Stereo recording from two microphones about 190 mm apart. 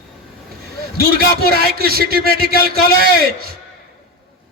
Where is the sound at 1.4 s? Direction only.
55° right (ahead or behind).